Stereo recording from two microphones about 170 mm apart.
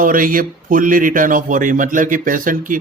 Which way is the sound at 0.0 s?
55° right (ahead or behind).